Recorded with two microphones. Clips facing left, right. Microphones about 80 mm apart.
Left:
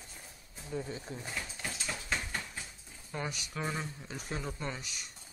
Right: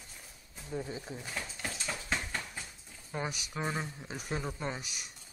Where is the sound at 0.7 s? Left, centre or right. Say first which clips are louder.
Even; centre.